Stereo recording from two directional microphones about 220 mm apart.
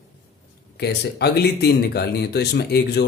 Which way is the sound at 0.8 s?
45° left (ahead or behind).